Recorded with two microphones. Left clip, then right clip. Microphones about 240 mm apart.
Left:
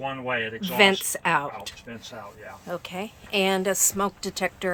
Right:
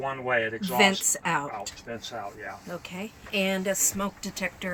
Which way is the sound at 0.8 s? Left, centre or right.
Centre.